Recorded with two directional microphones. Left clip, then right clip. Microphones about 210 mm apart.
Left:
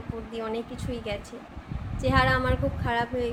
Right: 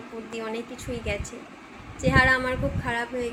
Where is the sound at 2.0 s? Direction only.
20° left (ahead or behind).